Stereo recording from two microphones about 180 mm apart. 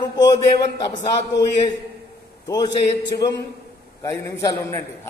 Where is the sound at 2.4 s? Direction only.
20° left (ahead or behind).